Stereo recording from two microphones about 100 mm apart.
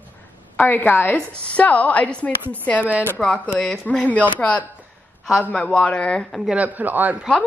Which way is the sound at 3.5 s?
Centre (ahead or behind).